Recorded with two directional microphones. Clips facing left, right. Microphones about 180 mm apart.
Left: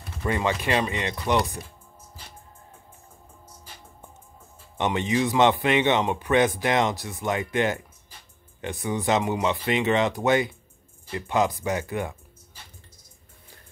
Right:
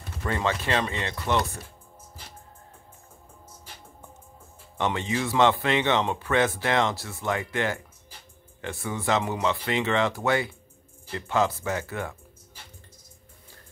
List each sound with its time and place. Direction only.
0.2 s speech: 15° left (ahead or behind)
4.7 s speech: 20° left (ahead or behind)